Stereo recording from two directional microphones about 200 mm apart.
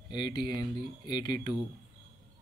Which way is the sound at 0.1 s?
20° left (ahead or behind).